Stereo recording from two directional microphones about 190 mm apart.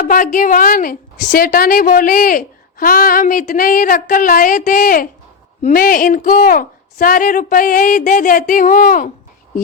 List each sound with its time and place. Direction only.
0.0 s a woman's voice: 45° left (ahead or behind)